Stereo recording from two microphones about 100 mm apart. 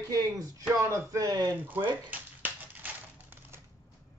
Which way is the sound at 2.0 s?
20° right (ahead or behind).